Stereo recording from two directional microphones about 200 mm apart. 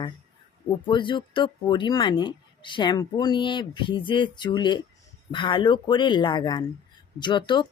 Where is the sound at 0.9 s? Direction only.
25° left (ahead or behind).